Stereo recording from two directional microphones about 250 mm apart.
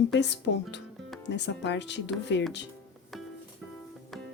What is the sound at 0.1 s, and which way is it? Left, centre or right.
Speech, left.